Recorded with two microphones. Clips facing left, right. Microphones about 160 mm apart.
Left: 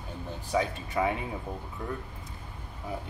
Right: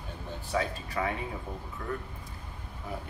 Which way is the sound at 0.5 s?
20° left (ahead or behind).